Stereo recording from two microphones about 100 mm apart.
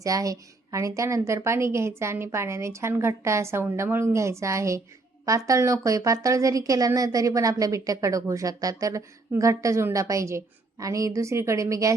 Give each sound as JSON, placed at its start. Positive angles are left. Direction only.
{"t": 0.0, "sound": "a woman's voice", "side_deg": -35}